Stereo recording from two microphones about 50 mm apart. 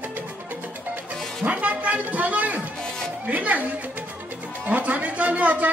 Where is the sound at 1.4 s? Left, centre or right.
Right.